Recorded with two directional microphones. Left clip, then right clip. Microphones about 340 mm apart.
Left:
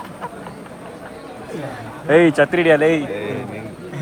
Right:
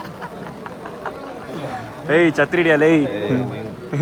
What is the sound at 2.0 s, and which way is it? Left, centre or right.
A man's voice, centre.